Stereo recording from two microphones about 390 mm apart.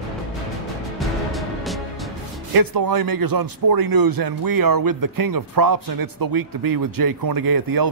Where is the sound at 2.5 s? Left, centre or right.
Right.